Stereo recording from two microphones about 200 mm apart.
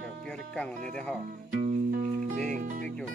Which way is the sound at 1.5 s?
40° right (ahead or behind).